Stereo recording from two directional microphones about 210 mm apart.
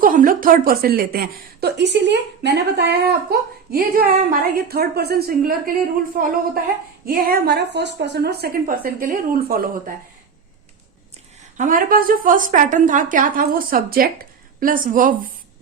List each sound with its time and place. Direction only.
0.0 s a woman's voice: 40° right (ahead or behind)
7.0 s a woman's voice: 45° right (ahead or behind)
11.5 s a woman's voice: 40° right (ahead or behind)